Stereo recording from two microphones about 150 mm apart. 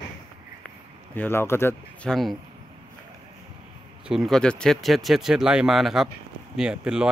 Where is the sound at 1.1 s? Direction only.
15° left (ahead or behind).